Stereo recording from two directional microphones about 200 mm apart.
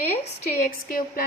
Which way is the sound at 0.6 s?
45° left (ahead or behind).